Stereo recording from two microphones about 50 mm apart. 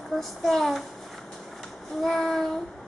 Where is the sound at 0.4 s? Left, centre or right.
Centre.